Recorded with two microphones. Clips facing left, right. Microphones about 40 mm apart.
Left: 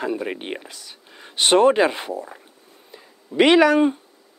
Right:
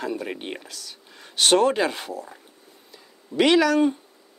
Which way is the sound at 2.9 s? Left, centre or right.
Left.